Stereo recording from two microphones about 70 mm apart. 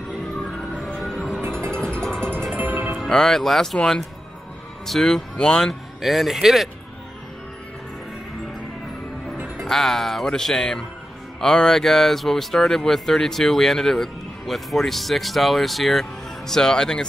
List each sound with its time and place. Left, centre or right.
0.9 s music: centre
2.5 s music: right
3.0 s speech: centre
5.9 s speech: centre
9.7 s speech: centre